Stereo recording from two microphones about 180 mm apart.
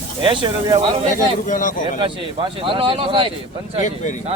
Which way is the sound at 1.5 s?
45° left (ahead or behind).